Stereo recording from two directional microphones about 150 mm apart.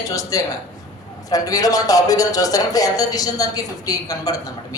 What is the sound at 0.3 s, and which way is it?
A woman's voice, 25° left (ahead or behind).